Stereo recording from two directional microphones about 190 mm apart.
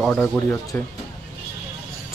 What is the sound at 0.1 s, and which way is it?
Speech, 15° left (ahead or behind).